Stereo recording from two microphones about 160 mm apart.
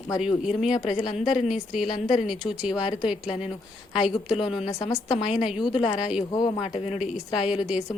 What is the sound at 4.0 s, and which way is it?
Speech, 5° right (ahead or behind).